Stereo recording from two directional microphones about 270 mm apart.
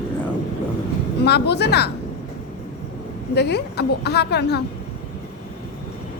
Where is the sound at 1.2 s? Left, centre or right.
Left.